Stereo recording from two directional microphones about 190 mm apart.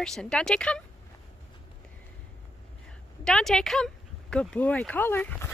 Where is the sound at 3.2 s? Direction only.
5° left (ahead or behind).